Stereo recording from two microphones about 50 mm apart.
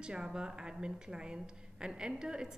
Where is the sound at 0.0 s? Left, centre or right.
Centre.